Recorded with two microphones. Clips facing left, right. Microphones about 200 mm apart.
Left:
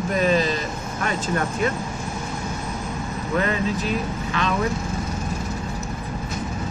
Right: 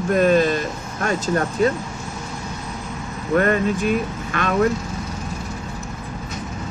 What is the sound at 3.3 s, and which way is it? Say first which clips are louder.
Speech: right 5 dB; 55° right (ahead or behind).